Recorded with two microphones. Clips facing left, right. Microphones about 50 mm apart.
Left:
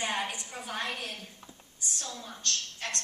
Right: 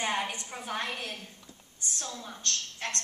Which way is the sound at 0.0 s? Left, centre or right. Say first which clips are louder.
Right 1 dB; right.